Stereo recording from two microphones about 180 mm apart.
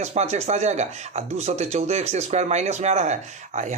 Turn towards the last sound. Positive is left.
turn(degrees=-40)  # may be behind; listen again after turning